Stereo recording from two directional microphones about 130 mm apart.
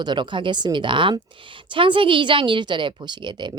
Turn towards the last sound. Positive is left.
turn(degrees=-35)  # may be behind; listen again after turning